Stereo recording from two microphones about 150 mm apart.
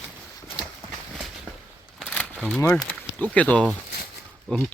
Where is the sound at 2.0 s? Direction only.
5° left (ahead or behind).